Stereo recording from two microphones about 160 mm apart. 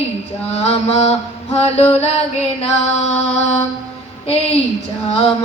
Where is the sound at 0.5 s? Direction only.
40° left (ahead or behind).